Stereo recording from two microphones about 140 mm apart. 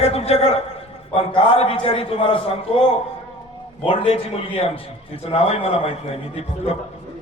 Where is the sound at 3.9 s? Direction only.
40° left (ahead or behind).